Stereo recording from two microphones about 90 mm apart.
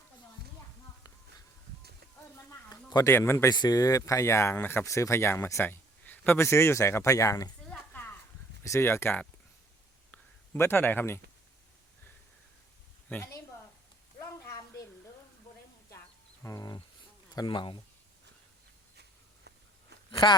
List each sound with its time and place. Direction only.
2.6 s a sound: 45° left (ahead or behind)
3.1 s speech: 30° left (ahead or behind)
3.5 s speech: 50° left (ahead or behind)
8.6 s speech: 30° left (ahead or behind)
10.6 s speech: 25° left (ahead or behind)
13.1 s speech: 20° left (ahead or behind)
14.2 s a sound: 40° left (ahead or behind)
16.4 s wild animals: 35° left (ahead or behind)
17.4 s speech: 60° left (ahead or behind)
20.1 s a sound: 55° left (ahead or behind)